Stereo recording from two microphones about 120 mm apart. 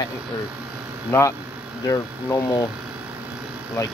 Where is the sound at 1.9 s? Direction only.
25° left (ahead or behind).